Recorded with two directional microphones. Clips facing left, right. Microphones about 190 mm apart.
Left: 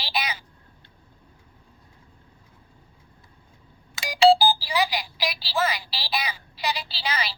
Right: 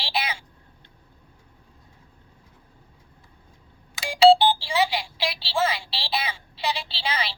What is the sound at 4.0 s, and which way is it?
Telephone dialing, 25° right (ahead or behind).